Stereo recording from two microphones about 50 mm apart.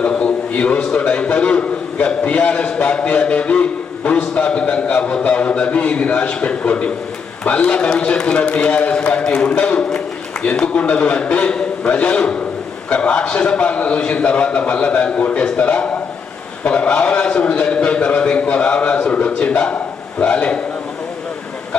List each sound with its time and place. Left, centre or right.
0.2 s a man's voice: left
19.7 s a man's voice: left